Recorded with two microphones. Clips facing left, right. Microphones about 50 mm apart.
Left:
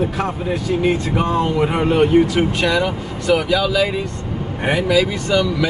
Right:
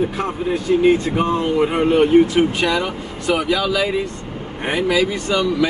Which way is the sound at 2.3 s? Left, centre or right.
Centre.